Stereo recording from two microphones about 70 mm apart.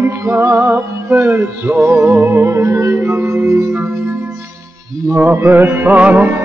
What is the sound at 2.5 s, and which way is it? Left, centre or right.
Music, right.